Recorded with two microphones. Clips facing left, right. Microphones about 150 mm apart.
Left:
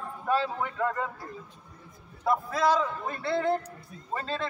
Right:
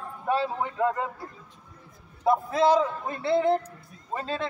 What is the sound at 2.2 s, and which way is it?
A man's voice, 25° right (ahead or behind).